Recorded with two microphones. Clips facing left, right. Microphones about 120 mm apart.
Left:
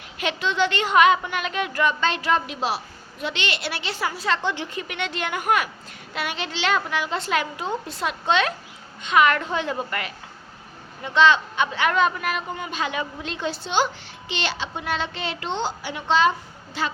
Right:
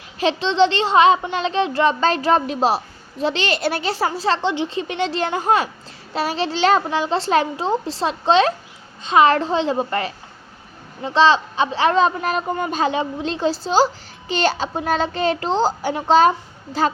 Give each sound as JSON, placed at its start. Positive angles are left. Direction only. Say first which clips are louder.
{"t": 0.2, "sound": "a woman's voice", "louder": "right 7 dB", "side_deg": -30}